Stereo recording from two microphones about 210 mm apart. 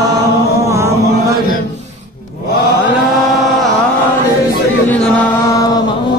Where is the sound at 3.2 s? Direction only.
Centre (ahead or behind).